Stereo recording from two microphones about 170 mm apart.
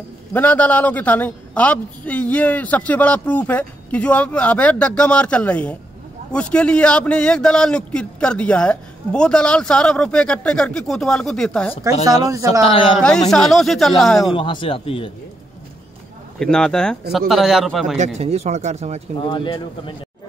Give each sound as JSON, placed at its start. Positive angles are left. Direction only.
{"t": 0.3, "sound": "a woman's voice", "side_deg": 10}
{"t": 12.1, "sound": "speech", "side_deg": -20}
{"t": 13.3, "sound": "a man's voice", "side_deg": 0}
{"t": 14.3, "sound": "speech", "side_deg": 30}
{"t": 16.3, "sound": "a man's voice", "side_deg": 5}
{"t": 17.9, "sound": "speech", "side_deg": -45}
{"t": 19.1, "sound": "speech", "side_deg": 30}